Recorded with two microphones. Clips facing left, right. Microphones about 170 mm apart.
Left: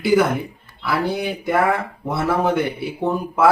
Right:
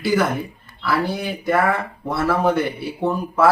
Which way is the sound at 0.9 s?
15° left (ahead or behind).